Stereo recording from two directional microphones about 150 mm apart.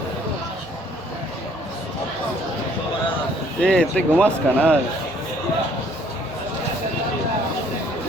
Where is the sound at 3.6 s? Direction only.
5° left (ahead or behind).